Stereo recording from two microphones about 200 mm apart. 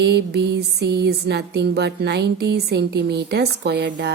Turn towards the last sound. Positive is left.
turn(degrees=-60)  # may be behind; listen again after turning